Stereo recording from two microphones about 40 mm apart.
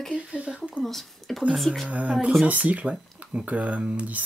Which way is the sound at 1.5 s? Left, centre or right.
Centre.